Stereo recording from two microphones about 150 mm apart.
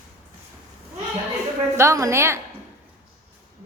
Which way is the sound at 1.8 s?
20° right (ahead or behind).